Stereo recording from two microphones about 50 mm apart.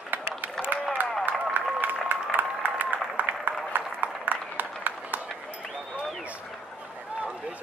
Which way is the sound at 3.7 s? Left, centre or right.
Right.